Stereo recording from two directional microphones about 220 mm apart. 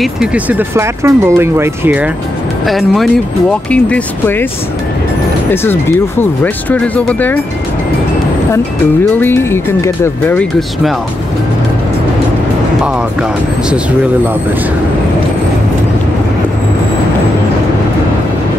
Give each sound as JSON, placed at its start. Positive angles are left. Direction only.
{"t": 0.0, "sound": "speech", "side_deg": -5}
{"t": 5.5, "sound": "speech", "side_deg": 10}
{"t": 9.1, "sound": "speech", "side_deg": 10}